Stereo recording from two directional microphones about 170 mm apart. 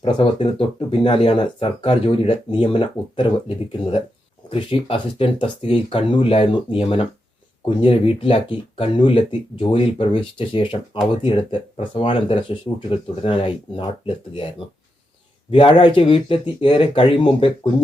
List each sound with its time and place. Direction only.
0.0 s speech: 30° left (ahead or behind)
11.8 s speech: 30° left (ahead or behind)
15.4 s speech: 30° left (ahead or behind)